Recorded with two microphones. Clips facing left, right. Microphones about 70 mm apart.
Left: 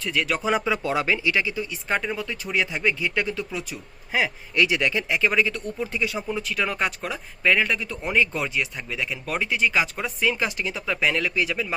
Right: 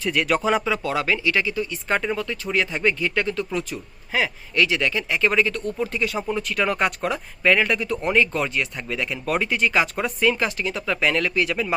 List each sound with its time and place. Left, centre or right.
0.0 s speech: centre
0.4 s speech: centre
1.7 s speech: centre
2.2 s speech: centre
4.1 s speech: centre
5.2 s speech: centre